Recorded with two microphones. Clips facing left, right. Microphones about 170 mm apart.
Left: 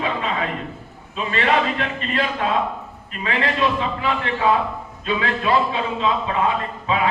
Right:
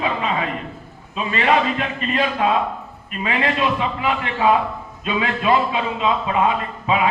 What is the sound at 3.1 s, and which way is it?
A man's voice, 20° right (ahead or behind).